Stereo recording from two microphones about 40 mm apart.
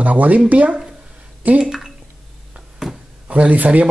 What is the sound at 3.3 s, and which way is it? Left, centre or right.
Speech, right.